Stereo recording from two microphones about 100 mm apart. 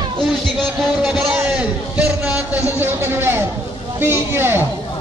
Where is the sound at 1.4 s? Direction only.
15° right (ahead or behind).